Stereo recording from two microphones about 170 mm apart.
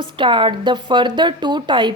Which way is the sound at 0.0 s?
30° right (ahead or behind).